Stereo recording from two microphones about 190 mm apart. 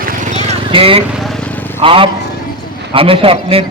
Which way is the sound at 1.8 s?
30° right (ahead or behind).